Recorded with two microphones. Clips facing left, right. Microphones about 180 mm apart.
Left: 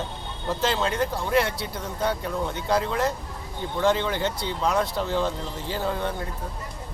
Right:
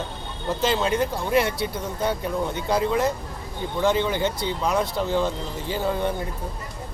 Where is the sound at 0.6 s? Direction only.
10° right (ahead or behind).